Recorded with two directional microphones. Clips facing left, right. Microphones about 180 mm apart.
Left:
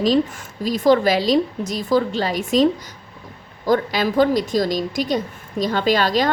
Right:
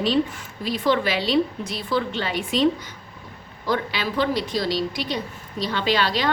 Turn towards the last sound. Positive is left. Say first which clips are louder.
# left 4 dB
turn(degrees=45)  # may be behind; listen again after turning